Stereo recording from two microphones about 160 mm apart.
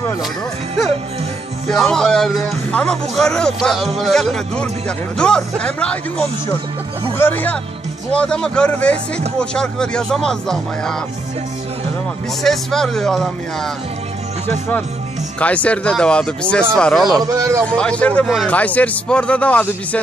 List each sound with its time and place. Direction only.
1.7 s a man's voice: 5° left (ahead or behind)
12.4 s a man's voice: 5° left (ahead or behind)
15.3 s a man's voice: 10° left (ahead or behind)
17.2 s a man's voice: 20° right (ahead or behind)
17.6 s a man's voice: 5° left (ahead or behind)